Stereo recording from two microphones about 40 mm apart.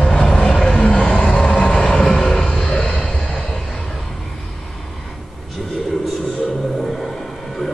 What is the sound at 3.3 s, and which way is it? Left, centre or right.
Train, centre.